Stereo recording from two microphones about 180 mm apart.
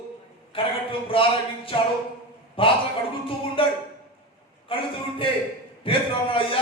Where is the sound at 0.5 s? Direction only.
30° left (ahead or behind).